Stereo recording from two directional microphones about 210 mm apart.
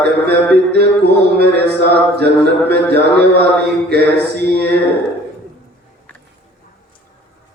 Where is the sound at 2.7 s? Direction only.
50° right (ahead or behind).